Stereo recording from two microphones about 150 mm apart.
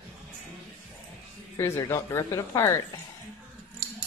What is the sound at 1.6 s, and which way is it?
A woman's voice, 15° left (ahead or behind).